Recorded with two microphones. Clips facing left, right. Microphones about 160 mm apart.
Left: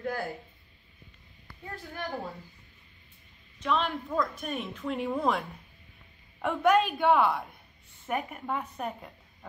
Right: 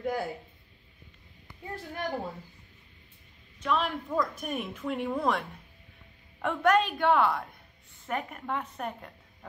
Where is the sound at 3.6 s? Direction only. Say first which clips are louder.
Even; 5° right (ahead or behind).